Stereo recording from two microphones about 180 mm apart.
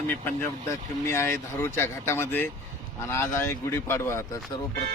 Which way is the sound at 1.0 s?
15° left (ahead or behind).